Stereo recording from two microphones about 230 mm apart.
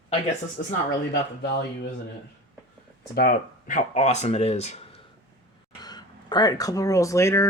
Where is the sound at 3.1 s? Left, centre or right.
Left.